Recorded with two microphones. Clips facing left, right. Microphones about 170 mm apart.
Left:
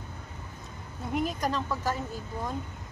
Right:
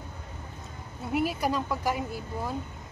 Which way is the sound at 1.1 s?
5° right (ahead or behind).